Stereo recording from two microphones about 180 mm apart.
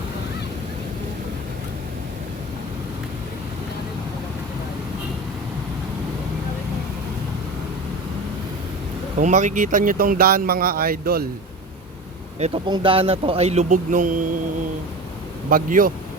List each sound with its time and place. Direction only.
9.1 s speech: 45° right (ahead or behind); by 11.3 s 60° right (ahead or behind)
12.4 s speech: 25° right (ahead or behind); by 14.3 s 45° right (ahead or behind)
15.4 s speech: 50° right (ahead or behind)